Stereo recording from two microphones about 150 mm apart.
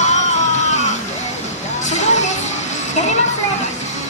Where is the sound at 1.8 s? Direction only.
50° left (ahead or behind).